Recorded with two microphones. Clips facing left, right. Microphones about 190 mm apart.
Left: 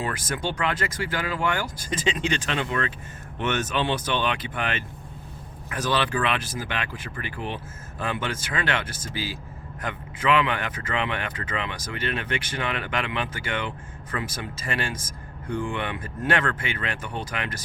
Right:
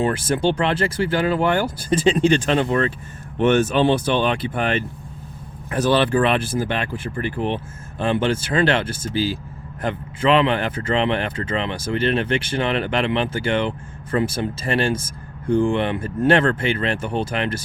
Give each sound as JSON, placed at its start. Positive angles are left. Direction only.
{"t": 0.0, "sound": "speech", "side_deg": -30}